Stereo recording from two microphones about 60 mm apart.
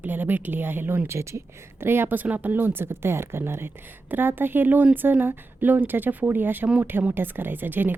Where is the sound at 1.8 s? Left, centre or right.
Right.